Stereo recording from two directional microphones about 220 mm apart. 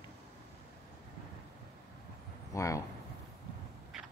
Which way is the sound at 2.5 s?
15° left (ahead or behind).